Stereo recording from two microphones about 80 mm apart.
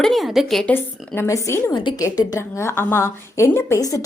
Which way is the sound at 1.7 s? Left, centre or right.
Left.